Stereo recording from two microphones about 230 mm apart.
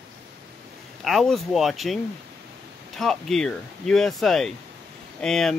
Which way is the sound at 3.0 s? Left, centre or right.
Centre.